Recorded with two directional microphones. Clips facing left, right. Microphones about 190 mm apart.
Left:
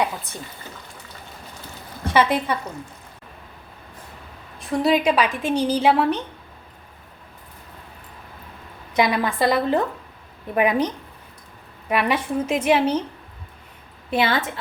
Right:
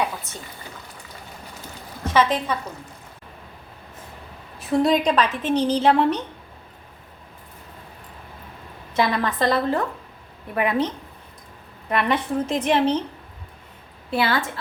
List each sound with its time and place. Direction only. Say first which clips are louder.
2.0 s a woman's voice: left 1 dB; 10° left (ahead or behind)
4.6 s a woman's voice: even; centre (ahead or behind)
9.0 s a woman's voice: left 2 dB; 10° left (ahead or behind)
14.1 s a woman's voice: left 1 dB; 20° left (ahead or behind)